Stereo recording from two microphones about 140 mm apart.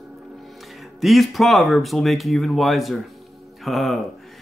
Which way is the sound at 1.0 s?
Centre (ahead or behind).